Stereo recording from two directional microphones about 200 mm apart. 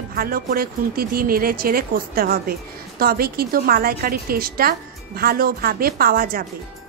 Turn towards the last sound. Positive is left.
turn(degrees=-45)  # may be behind; listen again after turning